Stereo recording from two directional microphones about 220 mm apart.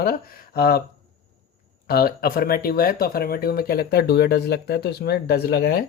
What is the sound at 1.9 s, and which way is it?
Speech, 45° left (ahead or behind).